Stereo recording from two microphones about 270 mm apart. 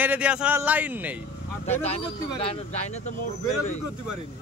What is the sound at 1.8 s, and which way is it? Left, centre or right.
A man's voice, left.